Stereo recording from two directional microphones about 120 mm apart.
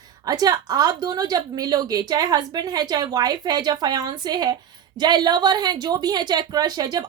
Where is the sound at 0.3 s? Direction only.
30° right (ahead or behind).